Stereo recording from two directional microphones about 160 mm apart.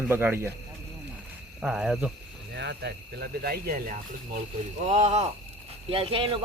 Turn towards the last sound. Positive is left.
turn(degrees=-35)  # may be behind; listen again after turning